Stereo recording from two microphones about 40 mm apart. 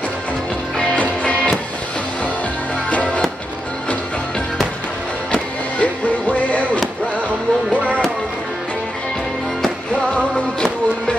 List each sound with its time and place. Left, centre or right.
1.2 s music: left
5.8 s music: left
7.7 s music: right